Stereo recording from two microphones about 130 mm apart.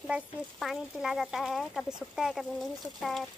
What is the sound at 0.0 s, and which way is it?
Speech, centre (ahead or behind).